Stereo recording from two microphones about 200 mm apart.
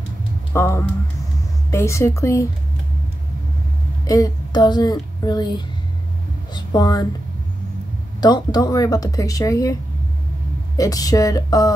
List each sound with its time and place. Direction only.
0.5 s speech: 10° left (ahead or behind)
4.0 s speech: 15° left (ahead or behind)
6.5 s speech: 20° left (ahead or behind)
8.2 s speech: 20° left (ahead or behind)
10.8 s speech: 15° left (ahead or behind)